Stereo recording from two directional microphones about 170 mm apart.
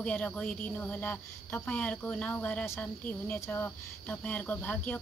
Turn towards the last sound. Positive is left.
turn(degrees=10)  # may be behind; listen again after turning